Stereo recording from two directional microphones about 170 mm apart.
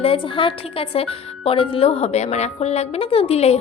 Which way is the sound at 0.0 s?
30° left (ahead or behind).